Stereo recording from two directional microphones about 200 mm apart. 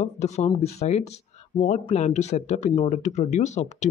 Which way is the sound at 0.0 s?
35° left (ahead or behind).